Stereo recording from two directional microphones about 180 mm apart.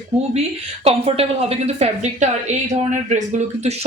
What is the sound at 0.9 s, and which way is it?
Speech, 35° right (ahead or behind).